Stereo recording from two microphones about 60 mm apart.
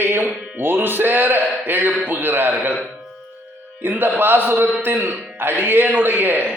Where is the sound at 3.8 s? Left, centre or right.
Right.